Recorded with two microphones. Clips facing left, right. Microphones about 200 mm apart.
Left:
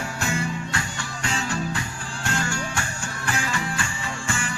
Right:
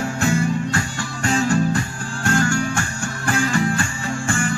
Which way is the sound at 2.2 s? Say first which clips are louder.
Right 9 dB; 50° right (ahead or behind).